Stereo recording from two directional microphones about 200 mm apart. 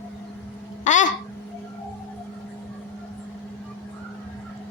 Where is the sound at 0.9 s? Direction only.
40° left (ahead or behind).